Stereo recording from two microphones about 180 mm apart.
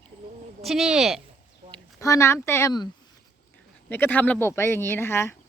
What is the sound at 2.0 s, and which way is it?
Speech, 15° left (ahead or behind).